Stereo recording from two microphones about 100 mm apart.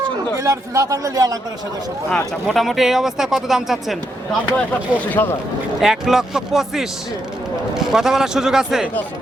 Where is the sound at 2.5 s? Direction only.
Centre (ahead or behind).